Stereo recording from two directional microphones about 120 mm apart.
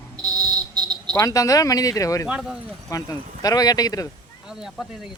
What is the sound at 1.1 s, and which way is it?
Speech, 30° left (ahead or behind).